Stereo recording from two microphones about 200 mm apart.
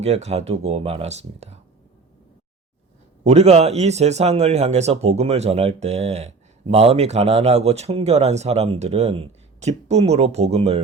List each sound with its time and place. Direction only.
0.0 s speech: 30° right (ahead or behind)
3.2 s speech: 30° right (ahead or behind)